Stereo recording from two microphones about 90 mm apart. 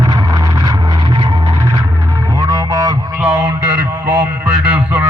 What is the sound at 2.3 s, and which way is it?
Music, 45° right (ahead or behind).